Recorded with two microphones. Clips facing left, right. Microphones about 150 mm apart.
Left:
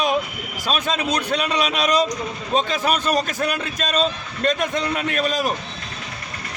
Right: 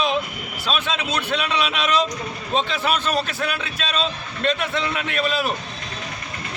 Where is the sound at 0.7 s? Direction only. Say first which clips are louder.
Left 3 dB; 45° left (ahead or behind).